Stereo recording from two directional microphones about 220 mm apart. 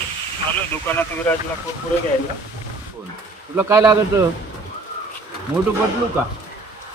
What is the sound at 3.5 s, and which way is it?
Speech, 15° right (ahead or behind).